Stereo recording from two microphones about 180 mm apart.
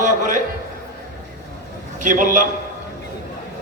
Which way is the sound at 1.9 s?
45° right (ahead or behind).